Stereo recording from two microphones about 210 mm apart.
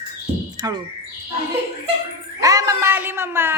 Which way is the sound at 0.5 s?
20° right (ahead or behind).